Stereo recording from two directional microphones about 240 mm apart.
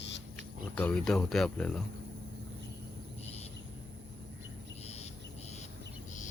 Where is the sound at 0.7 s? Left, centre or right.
Centre.